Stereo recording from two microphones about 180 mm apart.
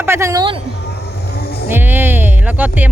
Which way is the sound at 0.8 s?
65° left (ahead or behind).